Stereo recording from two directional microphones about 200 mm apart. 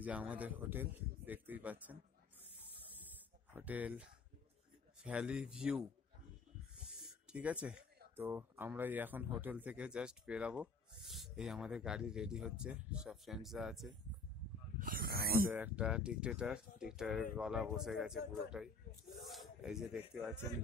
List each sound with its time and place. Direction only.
0.0 s speech: 5° right (ahead or behind)
3.5 s speech: 10° right (ahead or behind)
6.8 s owl: 5° right (ahead or behind)
7.6 s speech: 10° right (ahead or behind)
14.8 s a sound: 45° right (ahead or behind)
15.5 s speech: 5° right (ahead or behind)